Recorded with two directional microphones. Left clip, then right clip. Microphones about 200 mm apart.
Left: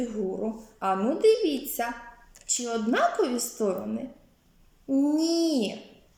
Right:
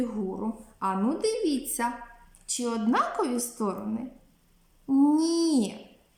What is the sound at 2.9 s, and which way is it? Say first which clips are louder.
Speech: left 3 dB; 20° right (ahead or behind).